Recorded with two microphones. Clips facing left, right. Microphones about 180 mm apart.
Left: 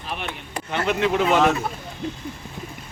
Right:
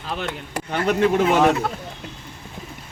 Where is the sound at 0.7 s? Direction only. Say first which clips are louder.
Right 2 dB; 40° right (ahead or behind).